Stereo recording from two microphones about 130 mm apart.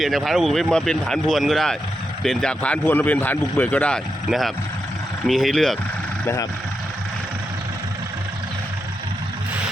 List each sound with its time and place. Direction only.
0.0 s a man's voice: centre (ahead or behind)
6.2 s speech: 25° left (ahead or behind)